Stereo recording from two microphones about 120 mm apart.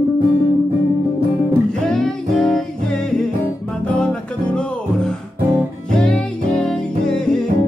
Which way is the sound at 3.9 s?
10° left (ahead or behind).